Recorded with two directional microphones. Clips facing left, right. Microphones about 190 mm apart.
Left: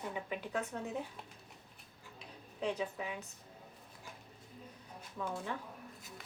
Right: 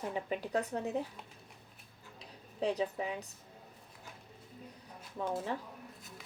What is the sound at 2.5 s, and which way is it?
Speech, 35° right (ahead or behind).